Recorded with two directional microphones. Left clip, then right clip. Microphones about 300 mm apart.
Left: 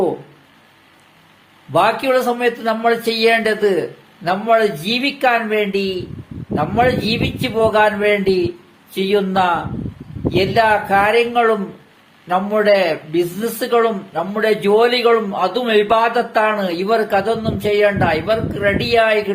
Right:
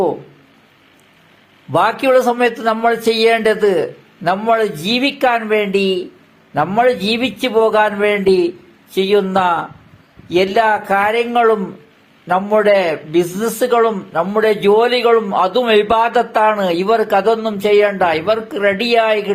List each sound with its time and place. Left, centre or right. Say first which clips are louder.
1.7 s a man's voice: right 2 dB; right